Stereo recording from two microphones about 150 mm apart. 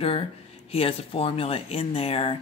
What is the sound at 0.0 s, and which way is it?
Speech, 40° left (ahead or behind).